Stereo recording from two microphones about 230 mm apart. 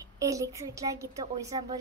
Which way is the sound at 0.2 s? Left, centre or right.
Centre.